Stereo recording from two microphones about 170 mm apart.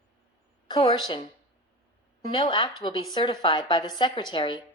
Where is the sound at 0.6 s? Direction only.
30° left (ahead or behind).